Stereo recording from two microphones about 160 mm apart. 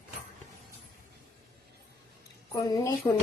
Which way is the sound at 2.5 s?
25° left (ahead or behind).